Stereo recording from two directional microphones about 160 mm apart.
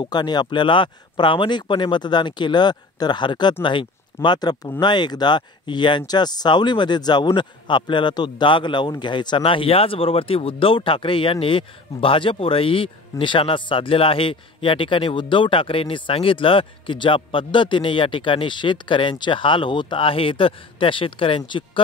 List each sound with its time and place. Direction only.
0.0 s speech: 25° left (ahead or behind)